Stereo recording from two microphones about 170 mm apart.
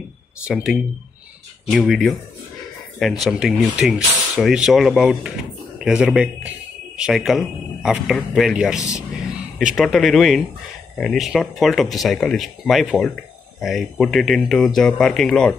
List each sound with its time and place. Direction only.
1.7 s speech: centre (ahead or behind)